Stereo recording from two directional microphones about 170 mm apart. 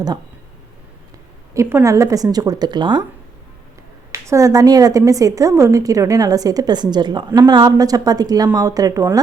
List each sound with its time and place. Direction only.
1.5 s a woman's voice: 15° right (ahead or behind)
4.1 s a woman's voice: 20° right (ahead or behind)